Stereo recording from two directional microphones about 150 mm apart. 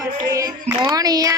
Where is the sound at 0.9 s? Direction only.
25° right (ahead or behind).